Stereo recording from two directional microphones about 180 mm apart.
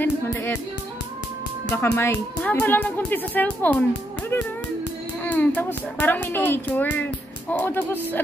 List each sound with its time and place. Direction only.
0.0 s music: 15° left (ahead or behind)
1.7 s speech: 15° left (ahead or behind)
5.2 s speech: 10° left (ahead or behind)